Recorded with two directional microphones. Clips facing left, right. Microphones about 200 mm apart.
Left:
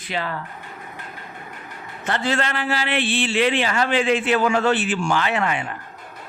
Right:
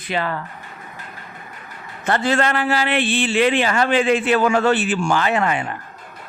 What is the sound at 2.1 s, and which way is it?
A man's voice, 50° right (ahead or behind).